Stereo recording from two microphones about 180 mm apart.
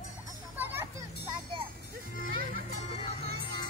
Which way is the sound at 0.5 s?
15° right (ahead or behind).